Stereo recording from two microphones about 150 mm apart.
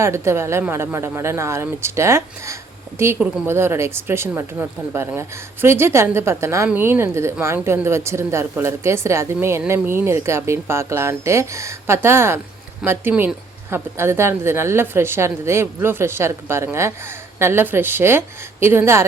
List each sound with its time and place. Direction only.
0.0 s a woman's voice: 20° right (ahead or behind)